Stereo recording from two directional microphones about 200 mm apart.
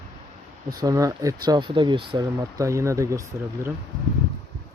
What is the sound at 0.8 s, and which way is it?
Speech, 15° right (ahead or behind).